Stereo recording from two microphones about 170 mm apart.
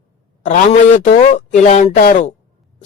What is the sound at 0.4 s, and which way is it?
A man's voice, 45° left (ahead or behind).